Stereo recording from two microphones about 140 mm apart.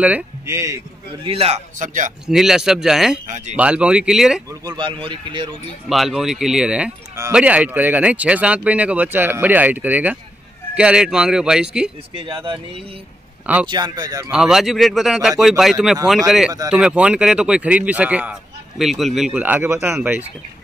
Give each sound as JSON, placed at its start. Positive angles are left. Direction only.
{"t": 0.5, "sound": "speech", "side_deg": -20}
{"t": 1.2, "sound": "a man's voice", "side_deg": -45}
{"t": 1.8, "sound": "speech", "side_deg": -65}
{"t": 2.2, "sound": "speech", "side_deg": -5}
{"t": 3.3, "sound": "speech", "side_deg": -60}
{"t": 3.5, "sound": "speech", "side_deg": -10}
{"t": 4.5, "sound": "speech", "side_deg": -30}
{"t": 5.9, "sound": "speech", "side_deg": 0}
{"t": 12.2, "sound": "speech", "side_deg": -40}
{"t": 14.3, "sound": "speech", "side_deg": -5}